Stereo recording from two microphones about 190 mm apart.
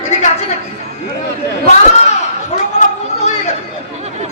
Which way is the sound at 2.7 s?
35° left (ahead or behind).